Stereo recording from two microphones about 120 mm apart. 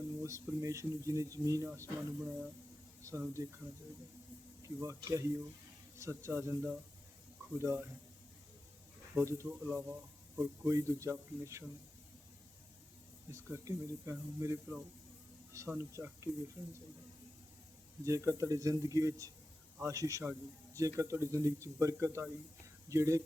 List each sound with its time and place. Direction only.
0.2 s speech: 25° right (ahead or behind)
4.6 s speech: 25° right (ahead or behind)
9.1 s speech: 25° right (ahead or behind)
13.3 s speech: 25° right (ahead or behind)
18.0 s speech: 25° right (ahead or behind)